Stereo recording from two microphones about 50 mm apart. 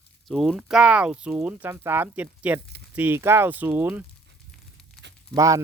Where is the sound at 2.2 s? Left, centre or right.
Right.